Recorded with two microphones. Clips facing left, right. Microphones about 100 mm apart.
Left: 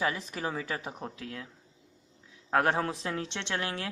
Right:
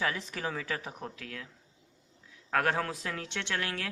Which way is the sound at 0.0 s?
20° left (ahead or behind).